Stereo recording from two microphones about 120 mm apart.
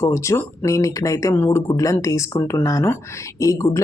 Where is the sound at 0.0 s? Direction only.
25° left (ahead or behind).